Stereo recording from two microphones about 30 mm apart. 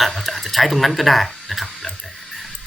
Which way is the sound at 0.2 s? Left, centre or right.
Centre.